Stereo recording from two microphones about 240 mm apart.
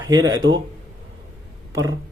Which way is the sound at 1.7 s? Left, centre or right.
Centre.